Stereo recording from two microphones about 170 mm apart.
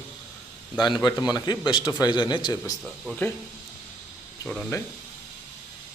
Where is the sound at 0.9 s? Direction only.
25° left (ahead or behind).